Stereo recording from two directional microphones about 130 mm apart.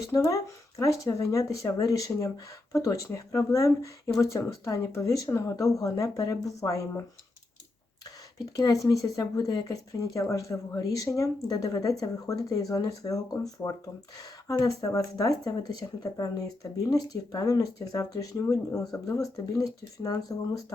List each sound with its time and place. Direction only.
0.1 s speech: 25° left (ahead or behind)
8.4 s speech: 30° left (ahead or behind)